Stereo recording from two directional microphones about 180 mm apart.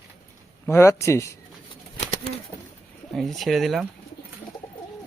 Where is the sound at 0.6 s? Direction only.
15° left (ahead or behind).